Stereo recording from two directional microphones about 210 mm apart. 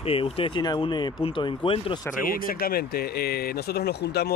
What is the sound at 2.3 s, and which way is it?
Speech, 45° left (ahead or behind).